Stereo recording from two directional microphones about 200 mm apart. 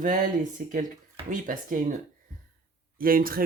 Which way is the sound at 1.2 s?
40° right (ahead or behind).